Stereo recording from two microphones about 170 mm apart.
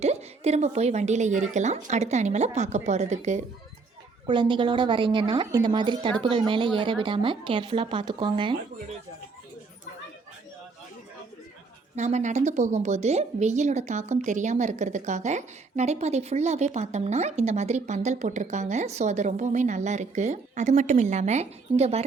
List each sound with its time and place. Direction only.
0.0 s a woman's voice: 40° right (ahead or behind)
4.3 s a woman's voice: 30° right (ahead or behind)
11.9 s a woman's voice: 45° right (ahead or behind)